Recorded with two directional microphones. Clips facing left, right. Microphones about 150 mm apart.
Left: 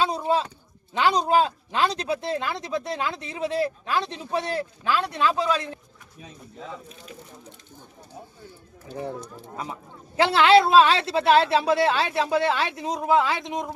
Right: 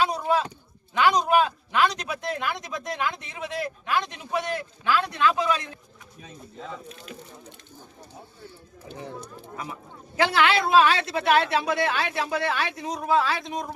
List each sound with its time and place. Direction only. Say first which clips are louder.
0.0 s a woman's voice: even; 25° left (ahead or behind)
10.2 s a woman's voice: left 5 dB; 25° left (ahead or behind)